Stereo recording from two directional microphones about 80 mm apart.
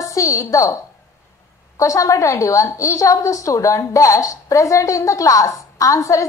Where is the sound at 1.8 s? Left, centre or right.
Left.